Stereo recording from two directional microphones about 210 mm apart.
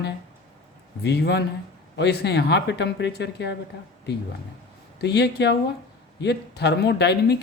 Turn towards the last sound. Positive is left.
turn(degrees=50)  # may be behind; listen again after turning